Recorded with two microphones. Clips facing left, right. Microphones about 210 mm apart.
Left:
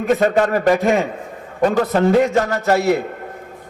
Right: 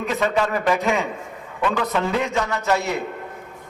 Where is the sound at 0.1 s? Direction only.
45° left (ahead or behind).